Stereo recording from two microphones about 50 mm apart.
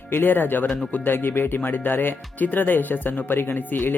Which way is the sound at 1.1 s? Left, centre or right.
Left.